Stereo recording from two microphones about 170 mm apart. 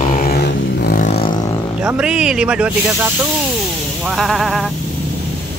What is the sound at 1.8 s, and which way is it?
Speech, 5° right (ahead or behind).